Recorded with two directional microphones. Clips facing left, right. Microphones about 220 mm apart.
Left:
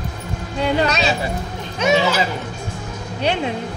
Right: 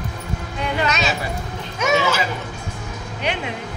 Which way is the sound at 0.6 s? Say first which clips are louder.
Left 4 dB; 35° left (ahead or behind).